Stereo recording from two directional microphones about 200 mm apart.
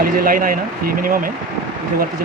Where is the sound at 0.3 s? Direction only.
45° right (ahead or behind).